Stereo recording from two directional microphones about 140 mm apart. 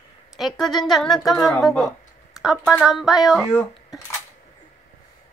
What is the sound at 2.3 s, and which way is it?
Speech, centre (ahead or behind).